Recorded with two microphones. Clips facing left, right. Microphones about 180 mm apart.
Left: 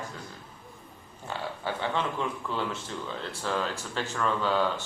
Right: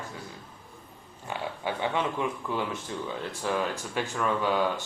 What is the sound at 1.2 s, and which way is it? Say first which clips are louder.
Speech: right 1 dB; 15° right (ahead or behind).